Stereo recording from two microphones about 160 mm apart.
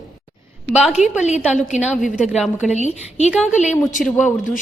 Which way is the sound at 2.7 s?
45° left (ahead or behind).